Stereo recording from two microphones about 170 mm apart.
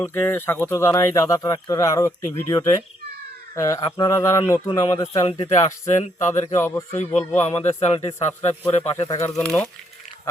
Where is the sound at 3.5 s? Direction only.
20° left (ahead or behind).